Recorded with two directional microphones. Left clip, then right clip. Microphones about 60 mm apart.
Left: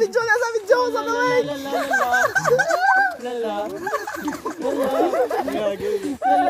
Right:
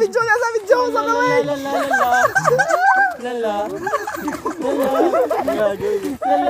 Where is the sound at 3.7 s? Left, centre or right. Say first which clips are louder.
Right 4 dB; centre.